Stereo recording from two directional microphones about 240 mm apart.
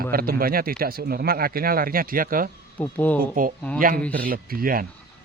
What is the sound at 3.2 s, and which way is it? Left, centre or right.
Speech, right.